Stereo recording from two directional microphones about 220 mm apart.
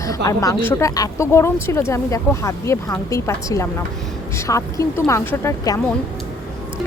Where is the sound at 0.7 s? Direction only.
15° left (ahead or behind).